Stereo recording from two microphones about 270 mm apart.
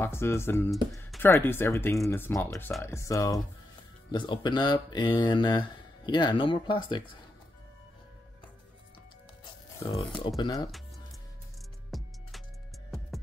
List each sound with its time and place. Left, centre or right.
0.0 s speech: centre
9.8 s speech: centre
11.9 s music: centre